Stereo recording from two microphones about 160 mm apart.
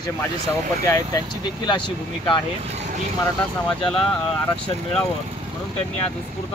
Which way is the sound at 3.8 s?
30° left (ahead or behind).